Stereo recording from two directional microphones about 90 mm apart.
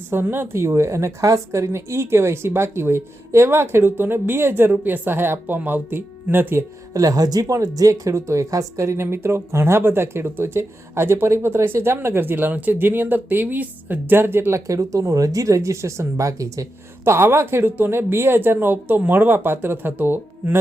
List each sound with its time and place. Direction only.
0.1 s speech: 25° right (ahead or behind)
7.0 s speech: 40° right (ahead or behind)
17.0 s speech: 25° right (ahead or behind)